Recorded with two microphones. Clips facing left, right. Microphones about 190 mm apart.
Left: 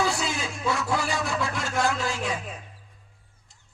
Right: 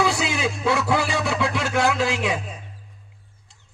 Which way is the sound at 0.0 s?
75° right (ahead or behind).